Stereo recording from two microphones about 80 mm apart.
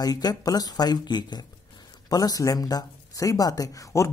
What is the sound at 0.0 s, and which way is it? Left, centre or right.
Speech, left.